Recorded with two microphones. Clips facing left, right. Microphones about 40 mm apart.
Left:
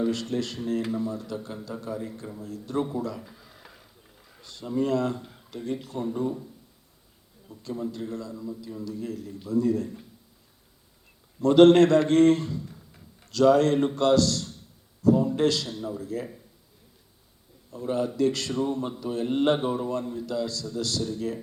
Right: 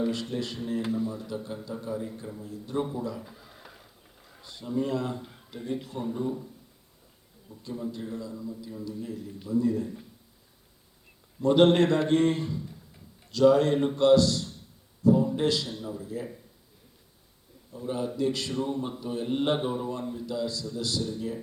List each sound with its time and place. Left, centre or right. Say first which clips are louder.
0.0 s a man's voice: left 3 dB; centre
1.7 s a man's voice: left 1 dB; centre
2.4 s a man's voice: left 3 dB; centre
2.7 s speech: left 2 dB; centre
3.2 s a sound: right 1 dB; centre
4.6 s speech: left 2 dB; centre
4.9 s speech: left 4 dB; centre
7.5 s a man's voice: left 2 dB; centre
11.3 s a man's voice: left 5 dB; centre
16.0 s a man's voice: left 3 dB; centre
17.9 s a man's voice: left 4 dB; centre
20.2 s a man's voice: left 2 dB; centre